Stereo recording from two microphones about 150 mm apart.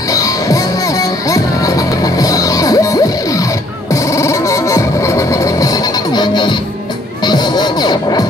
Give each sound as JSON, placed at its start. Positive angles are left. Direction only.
{"t": 0.1, "sound": "music", "side_deg": 20}